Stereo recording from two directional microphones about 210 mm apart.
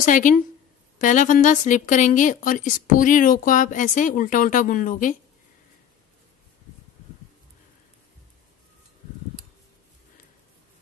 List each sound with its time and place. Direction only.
0.0 s a woman's voice: 40° left (ahead or behind)